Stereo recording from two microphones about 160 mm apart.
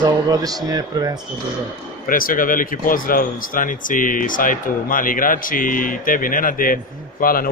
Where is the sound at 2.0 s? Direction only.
60° left (ahead or behind).